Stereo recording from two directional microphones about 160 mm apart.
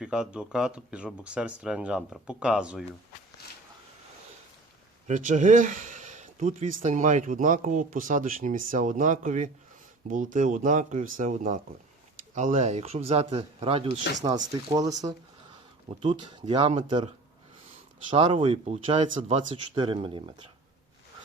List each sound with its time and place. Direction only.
0.0 s speech: 5° right (ahead or behind)
5.0 s speech: 50° right (ahead or behind)
14.3 s speech: 25° right (ahead or behind)
16.0 s speech: 35° right (ahead or behind)
18.1 s speech: 35° right (ahead or behind)